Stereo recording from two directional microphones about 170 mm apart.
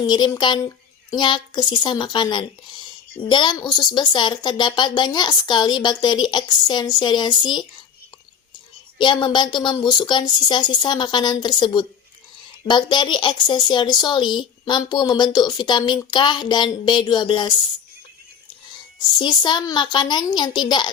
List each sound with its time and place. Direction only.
0.0 s a woman's voice: 25° left (ahead or behind)
9.0 s a woman's voice: 30° left (ahead or behind)
19.2 s a woman's voice: 25° left (ahead or behind)